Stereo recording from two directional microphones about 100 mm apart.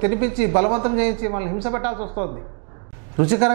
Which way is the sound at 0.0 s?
15° right (ahead or behind).